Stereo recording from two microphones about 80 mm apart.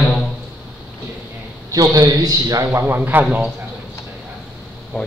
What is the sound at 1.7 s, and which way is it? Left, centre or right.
A man's voice, right.